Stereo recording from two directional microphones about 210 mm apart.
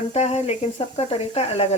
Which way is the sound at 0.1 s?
30° left (ahead or behind).